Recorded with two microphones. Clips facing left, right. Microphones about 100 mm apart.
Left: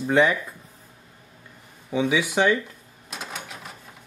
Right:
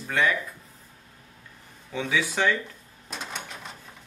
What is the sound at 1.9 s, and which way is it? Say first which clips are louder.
Speech: left 5 dB; 15° left (ahead or behind).